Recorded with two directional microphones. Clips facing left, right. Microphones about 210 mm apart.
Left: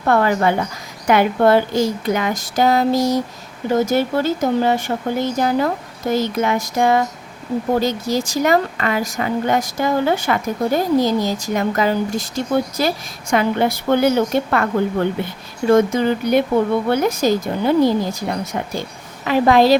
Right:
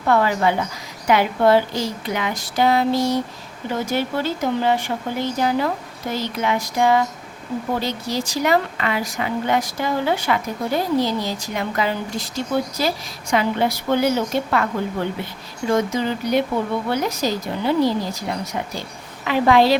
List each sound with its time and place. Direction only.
0.1 s a woman's voice: 50° left (ahead or behind)